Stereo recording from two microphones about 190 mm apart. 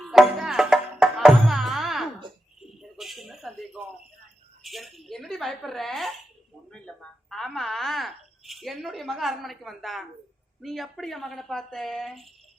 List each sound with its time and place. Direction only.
0.0 s music: centre (ahead or behind)
2.6 s a sound: centre (ahead or behind)
4.6 s speech: centre (ahead or behind)